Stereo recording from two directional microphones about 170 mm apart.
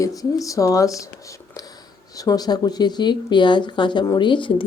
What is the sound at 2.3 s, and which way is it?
Speech, 25° left (ahead or behind).